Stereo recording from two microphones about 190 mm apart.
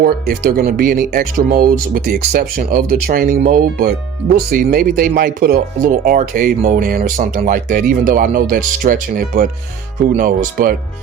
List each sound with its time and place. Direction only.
0.0 s speech: 50° right (ahead or behind)